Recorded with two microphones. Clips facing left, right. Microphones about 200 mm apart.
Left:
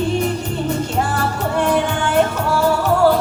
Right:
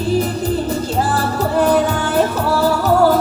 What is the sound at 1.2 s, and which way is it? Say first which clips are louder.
Music: right 3 dB; 35° right (ahead or behind).